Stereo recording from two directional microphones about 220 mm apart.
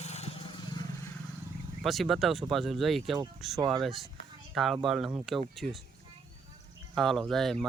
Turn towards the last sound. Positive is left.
turn(degrees=0)  # may be behind; listen again after turning